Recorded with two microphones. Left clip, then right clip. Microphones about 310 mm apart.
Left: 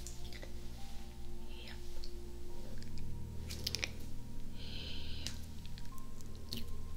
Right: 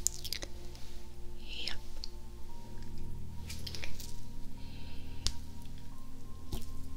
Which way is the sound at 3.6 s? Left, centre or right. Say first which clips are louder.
Left 6 dB; centre.